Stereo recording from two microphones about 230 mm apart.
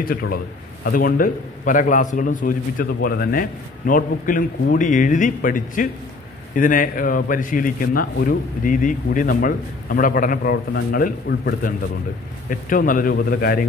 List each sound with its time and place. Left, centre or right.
0.0 s a man's voice: left